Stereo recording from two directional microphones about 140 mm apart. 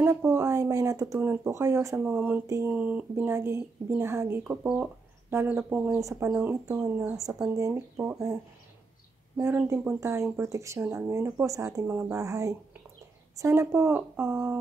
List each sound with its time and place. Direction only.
0.0 s speech: 15° right (ahead or behind)
5.9 s speech: 20° right (ahead or behind)
9.4 s speech: 20° right (ahead or behind)